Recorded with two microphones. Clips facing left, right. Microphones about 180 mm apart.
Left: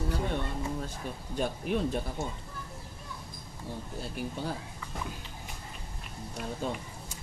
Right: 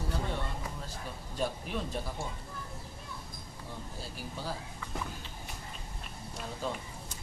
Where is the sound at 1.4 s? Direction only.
55° left (ahead or behind).